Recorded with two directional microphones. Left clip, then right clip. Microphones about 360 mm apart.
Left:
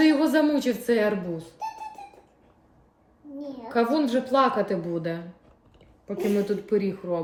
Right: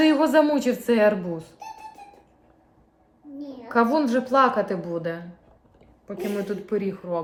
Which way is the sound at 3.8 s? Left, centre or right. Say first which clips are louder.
Right 3 dB; centre.